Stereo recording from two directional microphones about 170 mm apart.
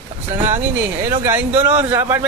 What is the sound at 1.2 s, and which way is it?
A man's voice, 10° right (ahead or behind).